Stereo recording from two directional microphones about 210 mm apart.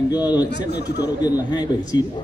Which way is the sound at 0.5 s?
55° left (ahead or behind).